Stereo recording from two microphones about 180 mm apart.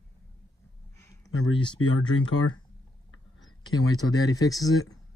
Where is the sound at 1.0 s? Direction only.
20° left (ahead or behind).